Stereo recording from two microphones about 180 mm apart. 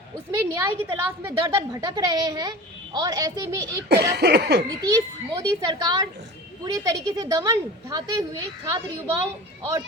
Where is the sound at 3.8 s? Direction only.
65° right (ahead or behind).